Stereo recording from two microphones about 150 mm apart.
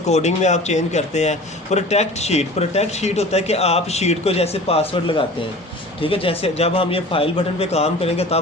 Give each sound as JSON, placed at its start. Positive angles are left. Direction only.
{"t": 0.0, "sound": "a man's voice", "side_deg": 50}